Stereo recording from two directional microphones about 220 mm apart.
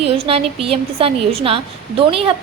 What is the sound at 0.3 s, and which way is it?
A woman's voice, 25° right (ahead or behind).